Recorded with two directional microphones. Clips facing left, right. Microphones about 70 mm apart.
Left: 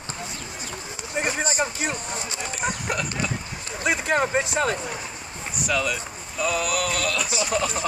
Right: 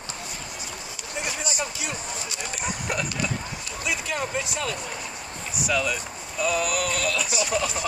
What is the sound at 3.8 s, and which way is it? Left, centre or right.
Speech, left.